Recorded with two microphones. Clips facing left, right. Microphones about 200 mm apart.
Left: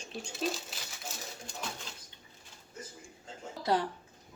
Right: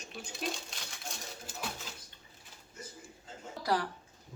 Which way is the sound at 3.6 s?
25° left (ahead or behind).